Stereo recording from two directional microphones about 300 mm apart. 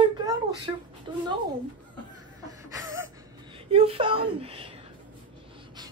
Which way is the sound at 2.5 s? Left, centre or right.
Centre.